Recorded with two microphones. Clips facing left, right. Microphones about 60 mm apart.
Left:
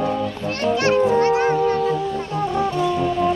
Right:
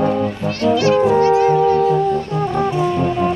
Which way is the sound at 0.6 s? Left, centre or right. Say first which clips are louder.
Right 4 dB; left.